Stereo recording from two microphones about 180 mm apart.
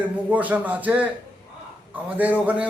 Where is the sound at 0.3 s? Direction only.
10° right (ahead or behind).